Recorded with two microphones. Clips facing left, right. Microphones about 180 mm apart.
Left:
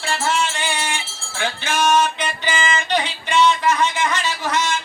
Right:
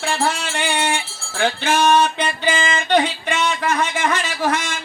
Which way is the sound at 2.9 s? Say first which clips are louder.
Right 5 dB; 50° right (ahead or behind).